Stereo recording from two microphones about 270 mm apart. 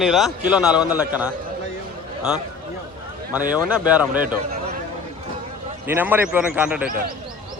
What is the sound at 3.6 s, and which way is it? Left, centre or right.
Speech, centre.